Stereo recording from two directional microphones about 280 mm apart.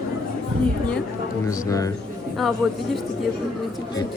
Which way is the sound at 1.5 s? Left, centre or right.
Centre.